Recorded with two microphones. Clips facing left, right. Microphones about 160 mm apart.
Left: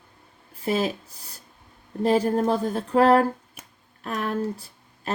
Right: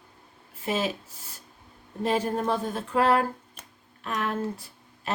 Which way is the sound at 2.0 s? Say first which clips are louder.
Left 5 dB; 35° left (ahead or behind).